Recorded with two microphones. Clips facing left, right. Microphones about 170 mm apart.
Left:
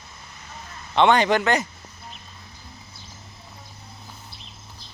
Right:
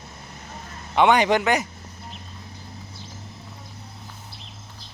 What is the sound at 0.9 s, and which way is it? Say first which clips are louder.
Speech: even; 10° right (ahead or behind).